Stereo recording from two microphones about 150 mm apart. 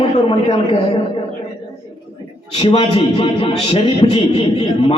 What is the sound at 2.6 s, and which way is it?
A man's voice, 35° left (ahead or behind).